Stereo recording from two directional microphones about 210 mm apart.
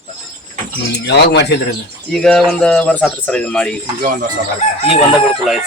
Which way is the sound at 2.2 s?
Centre (ahead or behind).